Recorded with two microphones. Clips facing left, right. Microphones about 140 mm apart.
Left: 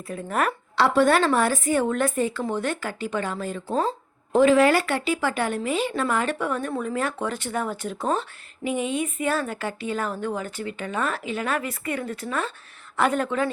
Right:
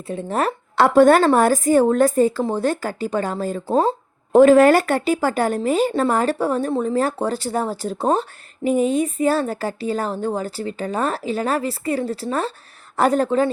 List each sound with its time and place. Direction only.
0.1 s speech: 30° right (ahead or behind)
0.8 s speech: 45° right (ahead or behind)
4.3 s a woman's voice: 45° right (ahead or behind)